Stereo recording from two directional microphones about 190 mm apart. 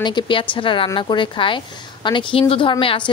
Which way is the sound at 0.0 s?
25° left (ahead or behind).